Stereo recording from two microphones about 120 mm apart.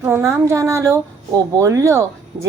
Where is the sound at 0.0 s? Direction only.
20° right (ahead or behind).